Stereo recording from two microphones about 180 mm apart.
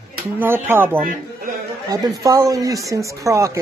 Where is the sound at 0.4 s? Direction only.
10° right (ahead or behind).